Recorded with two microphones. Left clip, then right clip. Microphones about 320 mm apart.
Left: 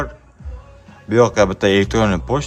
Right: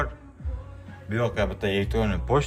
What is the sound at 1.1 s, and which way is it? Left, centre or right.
A man's voice, left.